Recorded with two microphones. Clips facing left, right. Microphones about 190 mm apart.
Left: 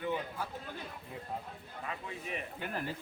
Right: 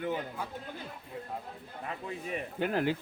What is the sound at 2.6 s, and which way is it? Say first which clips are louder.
Speech: right 12 dB; 85° right.